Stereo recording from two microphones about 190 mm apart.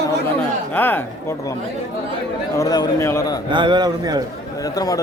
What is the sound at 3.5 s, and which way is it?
Speech, 25° right (ahead or behind).